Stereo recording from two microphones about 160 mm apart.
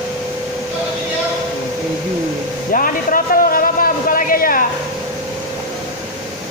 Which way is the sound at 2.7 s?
60° left (ahead or behind).